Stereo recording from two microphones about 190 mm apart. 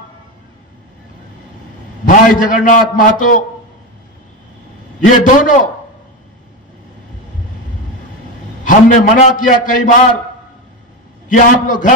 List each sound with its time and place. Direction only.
2.0 s a man's voice: 40° left (ahead or behind)
5.0 s a man's voice: 45° left (ahead or behind)
8.6 s a man's voice: 45° left (ahead or behind)
11.2 s a man's voice: 45° left (ahead or behind)